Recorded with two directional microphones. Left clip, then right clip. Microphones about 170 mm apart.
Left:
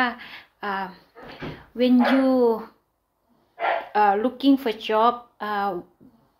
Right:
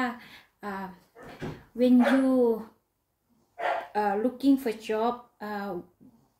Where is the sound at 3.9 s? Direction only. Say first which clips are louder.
Left 11 dB; 20° right (ahead or behind).